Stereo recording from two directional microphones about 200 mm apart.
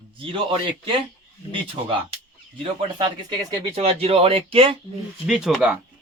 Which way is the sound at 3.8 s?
30° right (ahead or behind).